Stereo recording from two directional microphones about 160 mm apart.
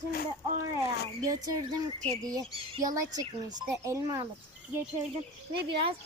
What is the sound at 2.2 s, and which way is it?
Speech, 25° right (ahead or behind).